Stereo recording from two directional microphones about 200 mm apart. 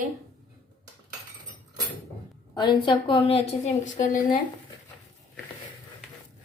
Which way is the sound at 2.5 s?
25° left (ahead or behind).